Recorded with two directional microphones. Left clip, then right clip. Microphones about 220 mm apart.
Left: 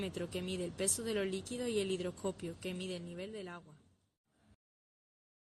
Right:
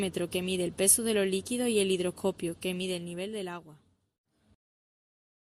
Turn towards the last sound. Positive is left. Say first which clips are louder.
# right 9 dB
turn(degrees=-35)  # may be behind; listen again after turning